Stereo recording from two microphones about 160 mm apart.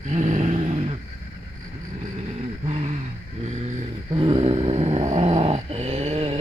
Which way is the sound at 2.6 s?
40° right (ahead or behind).